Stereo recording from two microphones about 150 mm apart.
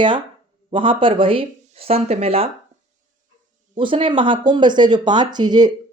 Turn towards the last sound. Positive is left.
turn(degrees=-30)  # may be behind; listen again after turning